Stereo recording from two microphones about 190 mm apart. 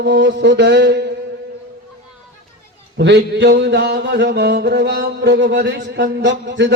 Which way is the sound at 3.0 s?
65° right (ahead or behind).